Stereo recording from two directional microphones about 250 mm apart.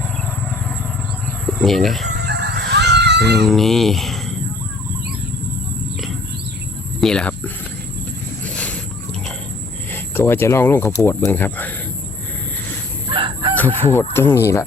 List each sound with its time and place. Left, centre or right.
1.5 s speech: centre
2.2 s fowl: right
3.3 s speech: centre
7.0 s a sound: centre
9.9 s speech: centre
13.1 s chicken: centre
13.6 s speech: centre